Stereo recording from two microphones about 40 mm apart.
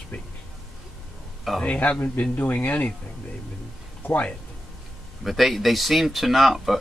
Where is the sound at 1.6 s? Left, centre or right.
Left.